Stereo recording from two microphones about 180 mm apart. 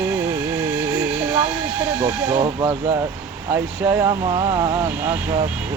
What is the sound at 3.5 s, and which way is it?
Speech, 10° right (ahead or behind).